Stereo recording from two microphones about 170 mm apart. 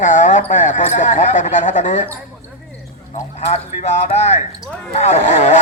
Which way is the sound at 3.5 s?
40° left (ahead or behind).